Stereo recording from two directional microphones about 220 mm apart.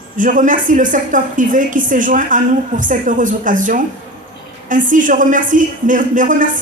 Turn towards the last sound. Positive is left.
turn(degrees=-35)  # may be behind; listen again after turning